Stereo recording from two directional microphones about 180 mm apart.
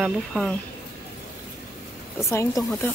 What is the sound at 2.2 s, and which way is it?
Speech, 15° left (ahead or behind).